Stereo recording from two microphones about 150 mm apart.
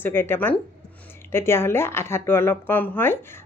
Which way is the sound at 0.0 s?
15° left (ahead or behind).